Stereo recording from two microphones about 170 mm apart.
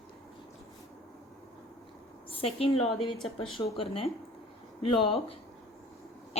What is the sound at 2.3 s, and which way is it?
A woman's voice, 35° left (ahead or behind).